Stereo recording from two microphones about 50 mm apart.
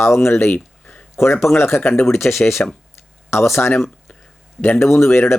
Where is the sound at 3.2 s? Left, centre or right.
Left.